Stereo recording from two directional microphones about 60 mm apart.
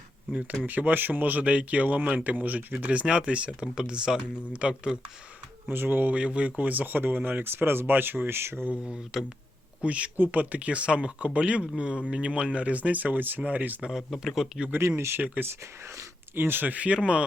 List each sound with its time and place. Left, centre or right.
0.7 s speech: right
5.6 s speech: right
8.8 s speech: centre
13.8 s speech: centre
14.8 s speech: right
16.3 s speech: right; by 17.2 s centre